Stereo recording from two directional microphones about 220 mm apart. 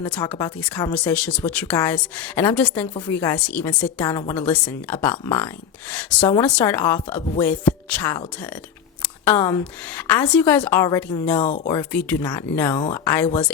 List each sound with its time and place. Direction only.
0.0 s a woman's voice: 5° left (ahead or behind)
0.9 s a woman's voice: 5° left (ahead or behind)
9.2 s a woman's voice: 10° left (ahead or behind)
11.4 s speech: 35° left (ahead or behind)
11.7 s a woman's voice: 10° left (ahead or behind)